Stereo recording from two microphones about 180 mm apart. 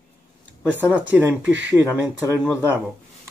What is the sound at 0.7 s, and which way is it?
Speech, 10° right (ahead or behind).